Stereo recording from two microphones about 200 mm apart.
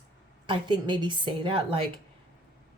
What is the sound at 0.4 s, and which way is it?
A woman's voice, 25° right (ahead or behind).